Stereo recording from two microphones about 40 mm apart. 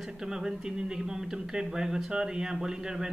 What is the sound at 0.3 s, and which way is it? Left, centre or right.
A man's voice, centre.